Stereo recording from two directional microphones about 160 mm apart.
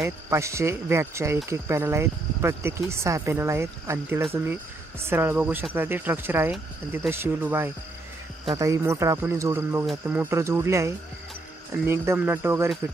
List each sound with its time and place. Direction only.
0.0 s speech: 15° right (ahead or behind)